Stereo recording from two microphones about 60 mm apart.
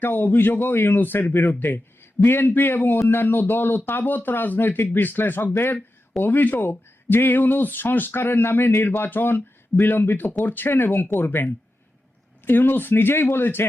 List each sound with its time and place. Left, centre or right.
0.0 s speech: left
9.0 s speech: left